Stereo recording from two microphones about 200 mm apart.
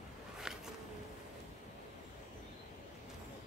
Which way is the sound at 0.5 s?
5° right (ahead or behind).